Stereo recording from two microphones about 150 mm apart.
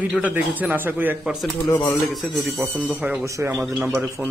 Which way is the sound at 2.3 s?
Centre (ahead or behind).